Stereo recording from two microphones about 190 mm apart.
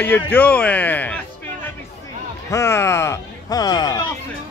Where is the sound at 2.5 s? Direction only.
15° left (ahead or behind).